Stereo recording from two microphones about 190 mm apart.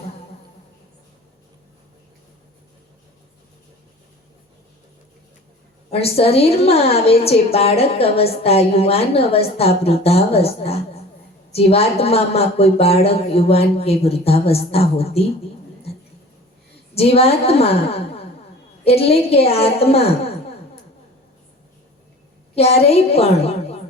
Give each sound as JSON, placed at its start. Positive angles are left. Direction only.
{"t": 5.9, "sound": "a woman's voice", "side_deg": 30}
{"t": 16.9, "sound": "a woman's voice", "side_deg": 30}
{"t": 22.5, "sound": "a woman's voice", "side_deg": 30}